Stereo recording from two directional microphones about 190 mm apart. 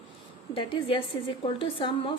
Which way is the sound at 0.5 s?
25° left (ahead or behind).